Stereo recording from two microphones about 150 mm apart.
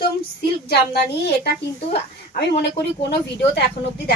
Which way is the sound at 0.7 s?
90° left.